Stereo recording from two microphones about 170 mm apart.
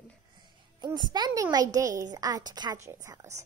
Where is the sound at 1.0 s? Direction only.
25° right (ahead or behind).